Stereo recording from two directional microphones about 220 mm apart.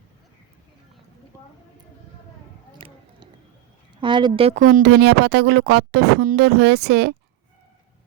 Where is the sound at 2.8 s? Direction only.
25° right (ahead or behind).